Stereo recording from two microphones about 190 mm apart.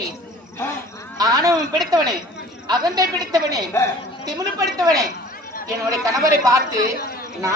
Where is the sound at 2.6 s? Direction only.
20° right (ahead or behind).